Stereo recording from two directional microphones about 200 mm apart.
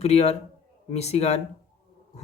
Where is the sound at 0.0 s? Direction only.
30° left (ahead or behind).